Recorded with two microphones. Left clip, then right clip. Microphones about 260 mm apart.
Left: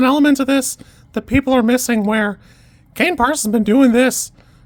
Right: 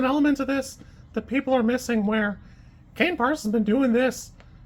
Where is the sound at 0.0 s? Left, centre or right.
Left.